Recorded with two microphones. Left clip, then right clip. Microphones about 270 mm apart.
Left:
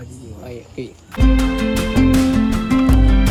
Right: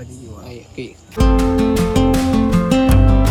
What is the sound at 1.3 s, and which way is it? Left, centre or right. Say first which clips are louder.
Music: right 4 dB; centre.